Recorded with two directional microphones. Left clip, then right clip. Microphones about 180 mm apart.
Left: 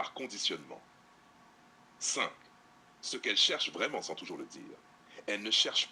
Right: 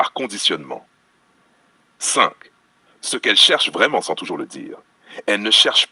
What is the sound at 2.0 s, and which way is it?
Speech, 45° right (ahead or behind).